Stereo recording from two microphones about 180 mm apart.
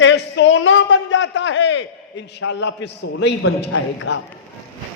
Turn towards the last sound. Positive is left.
turn(degrees=90)